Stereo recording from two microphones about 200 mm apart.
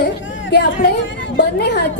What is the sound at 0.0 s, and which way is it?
Chatter, 60° left (ahead or behind).